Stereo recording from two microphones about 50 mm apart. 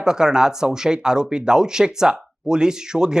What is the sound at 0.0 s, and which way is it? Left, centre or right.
Speech, centre.